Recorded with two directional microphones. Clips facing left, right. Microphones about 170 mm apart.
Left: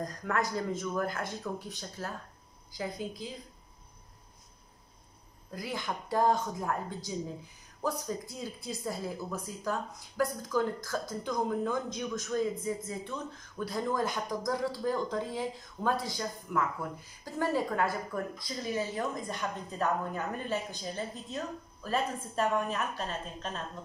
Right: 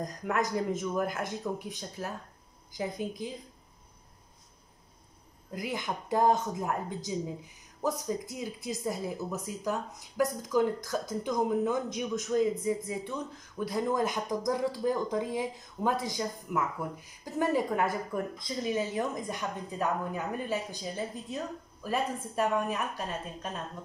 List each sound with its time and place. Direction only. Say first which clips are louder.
0.0 s speech: right 1 dB; 15° right (ahead or behind)
5.5 s speech: right 2 dB; 15° right (ahead or behind)